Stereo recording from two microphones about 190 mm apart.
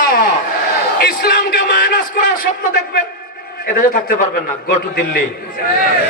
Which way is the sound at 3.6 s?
40° left (ahead or behind).